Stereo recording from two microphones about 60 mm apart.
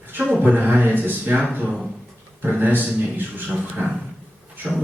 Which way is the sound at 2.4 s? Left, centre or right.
Right.